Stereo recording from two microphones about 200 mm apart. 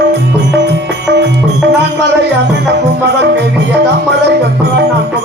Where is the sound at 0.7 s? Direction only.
55° right (ahead or behind).